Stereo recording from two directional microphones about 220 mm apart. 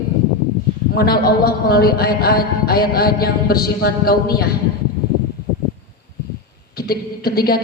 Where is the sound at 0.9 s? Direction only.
45° left (ahead or behind).